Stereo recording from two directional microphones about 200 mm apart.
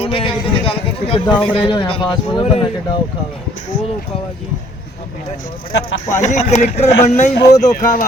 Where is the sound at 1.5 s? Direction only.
25° left (ahead or behind).